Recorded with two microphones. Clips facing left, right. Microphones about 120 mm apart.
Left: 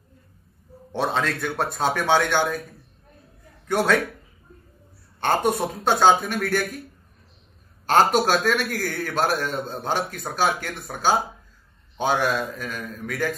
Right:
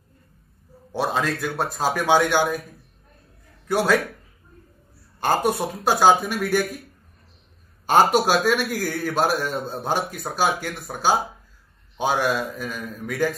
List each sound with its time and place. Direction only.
0.9 s a man's voice: 5° right (ahead or behind)
3.6 s a man's voice: 5° right (ahead or behind)
5.2 s a man's voice: 5° right (ahead or behind)
7.8 s a man's voice: 10° right (ahead or behind)